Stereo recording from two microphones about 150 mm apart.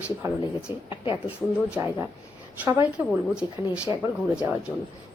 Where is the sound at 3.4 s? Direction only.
30° left (ahead or behind).